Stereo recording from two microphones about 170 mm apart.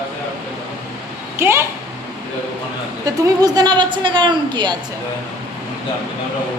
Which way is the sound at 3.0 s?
25° right (ahead or behind).